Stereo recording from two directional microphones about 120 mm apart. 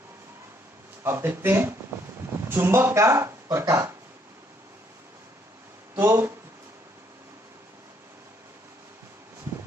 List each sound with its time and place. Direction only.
1.0 s speech: 20° right (ahead or behind)
6.0 s speech: 20° right (ahead or behind)